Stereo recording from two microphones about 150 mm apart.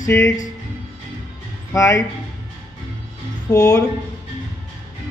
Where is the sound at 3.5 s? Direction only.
25° left (ahead or behind).